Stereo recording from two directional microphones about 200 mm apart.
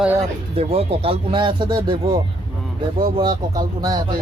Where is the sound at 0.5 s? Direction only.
30° right (ahead or behind).